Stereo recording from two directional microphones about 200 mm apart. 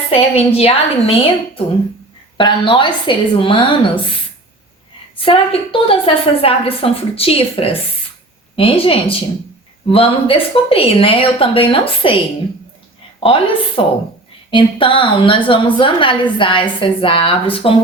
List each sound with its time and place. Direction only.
0.1 s a woman's voice: 30° left (ahead or behind)
5.2 s a woman's voice: 25° left (ahead or behind)
13.1 s a woman's voice: 25° left (ahead or behind)